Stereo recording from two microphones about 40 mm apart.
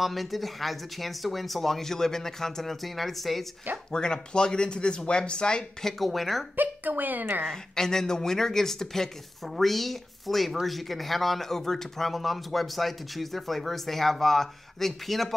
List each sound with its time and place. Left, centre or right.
0.0 s speech: centre
3.9 s speech: centre
6.5 s a woman's voice: right
7.4 s speech: centre